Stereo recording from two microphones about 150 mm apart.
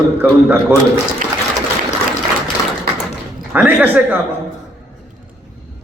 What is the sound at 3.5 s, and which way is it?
Speech, 10° right (ahead or behind).